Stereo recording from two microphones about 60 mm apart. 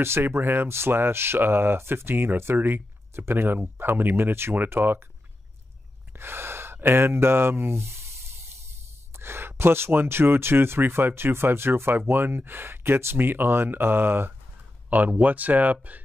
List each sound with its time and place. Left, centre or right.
0.0 s speech: right
6.1 s speech: right
9.2 s speech: right
14.9 s speech: right